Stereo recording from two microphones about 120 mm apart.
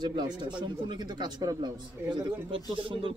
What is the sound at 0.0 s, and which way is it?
Speech, 35° right (ahead or behind).